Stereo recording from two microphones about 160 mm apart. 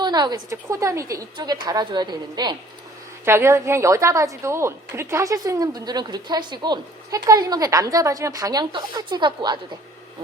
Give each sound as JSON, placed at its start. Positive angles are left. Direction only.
{"t": 0.0, "sound": "a woman's voice", "side_deg": -25}
{"t": 3.2, "sound": "a woman's voice", "side_deg": -15}